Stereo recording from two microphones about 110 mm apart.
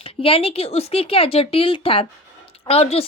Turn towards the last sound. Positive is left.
turn(degrees=65)  # may be behind; listen again after turning